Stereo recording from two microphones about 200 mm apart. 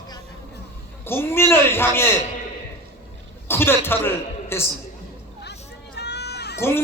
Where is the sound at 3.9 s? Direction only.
10° left (ahead or behind).